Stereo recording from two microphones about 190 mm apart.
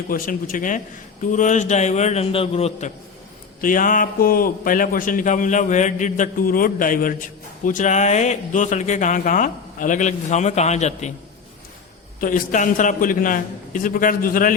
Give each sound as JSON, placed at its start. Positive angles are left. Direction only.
{"t": 0.1, "sound": "a man's voice", "side_deg": 45}
{"t": 3.6, "sound": "a man's voice", "side_deg": 45}
{"t": 12.2, "sound": "a man's voice", "side_deg": 40}